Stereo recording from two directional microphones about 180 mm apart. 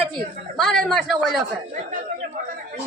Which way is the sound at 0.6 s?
Centre (ahead or behind).